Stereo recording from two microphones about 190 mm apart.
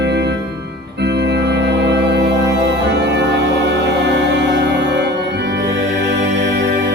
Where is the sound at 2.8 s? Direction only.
60° right (ahead or behind).